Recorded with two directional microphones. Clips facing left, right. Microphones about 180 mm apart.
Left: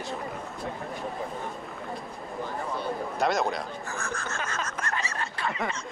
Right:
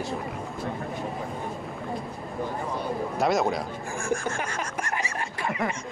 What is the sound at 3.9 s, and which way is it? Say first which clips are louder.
Snicker: right 8 dB; 15° right (ahead or behind).